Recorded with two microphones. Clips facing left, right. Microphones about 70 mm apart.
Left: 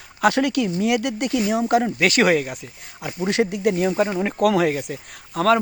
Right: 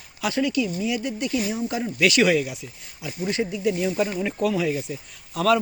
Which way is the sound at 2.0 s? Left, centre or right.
Left.